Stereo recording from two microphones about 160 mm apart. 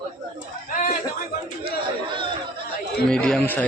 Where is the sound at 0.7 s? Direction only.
55° left (ahead or behind).